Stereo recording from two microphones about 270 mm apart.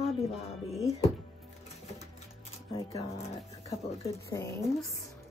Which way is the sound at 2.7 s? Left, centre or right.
Centre.